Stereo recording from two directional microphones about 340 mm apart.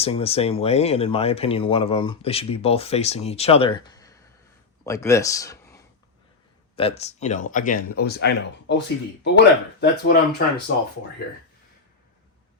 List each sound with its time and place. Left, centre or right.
0.0 s speech: centre